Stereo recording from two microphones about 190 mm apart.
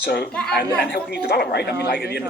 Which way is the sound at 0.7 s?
60° left (ahead or behind).